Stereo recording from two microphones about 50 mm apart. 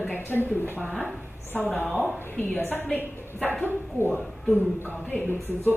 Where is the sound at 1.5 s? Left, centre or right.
Left.